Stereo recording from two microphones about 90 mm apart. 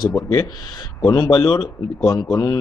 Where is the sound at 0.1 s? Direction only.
40° left (ahead or behind).